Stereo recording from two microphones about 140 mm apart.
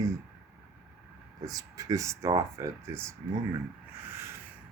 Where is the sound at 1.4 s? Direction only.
25° right (ahead or behind).